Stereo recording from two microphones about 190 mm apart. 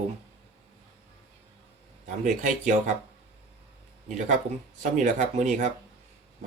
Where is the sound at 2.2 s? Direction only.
40° right (ahead or behind).